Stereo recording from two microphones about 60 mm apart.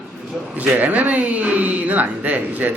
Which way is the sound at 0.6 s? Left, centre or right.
Right.